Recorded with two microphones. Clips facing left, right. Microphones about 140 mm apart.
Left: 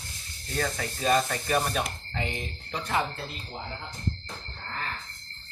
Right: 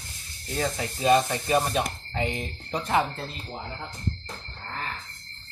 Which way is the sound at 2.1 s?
35° right (ahead or behind).